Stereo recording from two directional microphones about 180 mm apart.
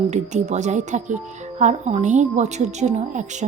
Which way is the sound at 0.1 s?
40° right (ahead or behind).